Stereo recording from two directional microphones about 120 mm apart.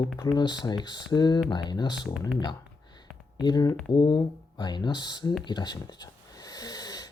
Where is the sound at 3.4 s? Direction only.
35° left (ahead or behind).